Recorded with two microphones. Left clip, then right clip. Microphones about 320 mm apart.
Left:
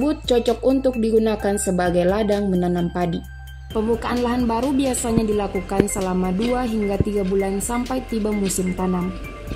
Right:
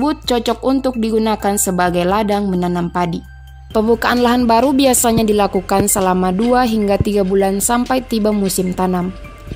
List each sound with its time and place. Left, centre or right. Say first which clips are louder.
0.0 s speech: right 2 dB; right